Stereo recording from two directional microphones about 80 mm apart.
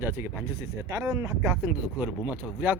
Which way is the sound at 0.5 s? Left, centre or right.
Right.